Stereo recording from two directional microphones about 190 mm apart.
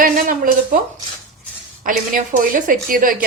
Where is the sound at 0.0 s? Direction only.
45° right (ahead or behind).